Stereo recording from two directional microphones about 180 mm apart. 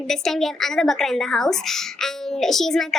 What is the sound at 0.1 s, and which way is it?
A woman's voice, centre (ahead or behind).